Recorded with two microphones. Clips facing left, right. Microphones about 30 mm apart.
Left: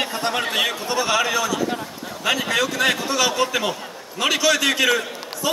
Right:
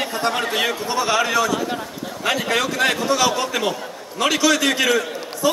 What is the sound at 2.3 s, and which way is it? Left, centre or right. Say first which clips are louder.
A man's voice: even; centre.